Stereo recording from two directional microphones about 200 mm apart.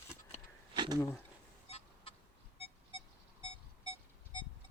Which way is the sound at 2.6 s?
25° left (ahead or behind).